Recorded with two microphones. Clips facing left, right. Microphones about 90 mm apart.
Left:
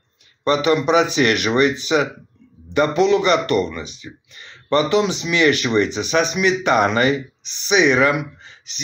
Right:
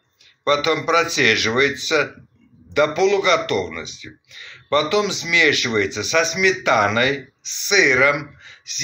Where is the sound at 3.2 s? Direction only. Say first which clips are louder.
Left 1 dB; 40° left (ahead or behind).